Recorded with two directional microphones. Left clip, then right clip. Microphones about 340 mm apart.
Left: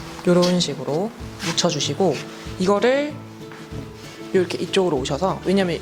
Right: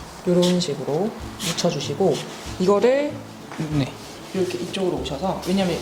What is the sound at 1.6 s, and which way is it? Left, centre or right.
Speech, left.